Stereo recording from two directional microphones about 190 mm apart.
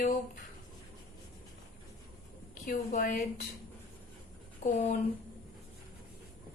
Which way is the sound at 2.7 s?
45° left (ahead or behind).